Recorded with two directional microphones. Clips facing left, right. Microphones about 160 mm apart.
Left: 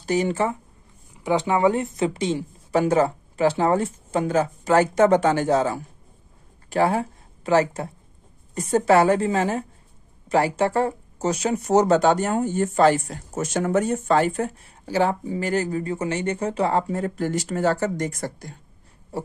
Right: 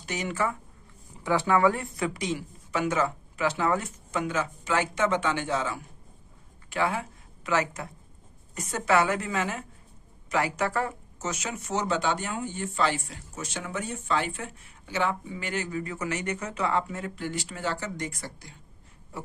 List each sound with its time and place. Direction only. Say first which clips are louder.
0.0 s speech: left 8 dB; 35° left (ahead or behind)
1.2 s speech: left 3 dB; 15° left (ahead or behind); by 18.6 s 45° left (ahead or behind)